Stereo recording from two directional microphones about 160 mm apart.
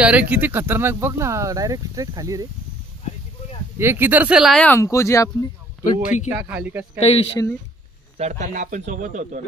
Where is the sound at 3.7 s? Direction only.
15° right (ahead or behind).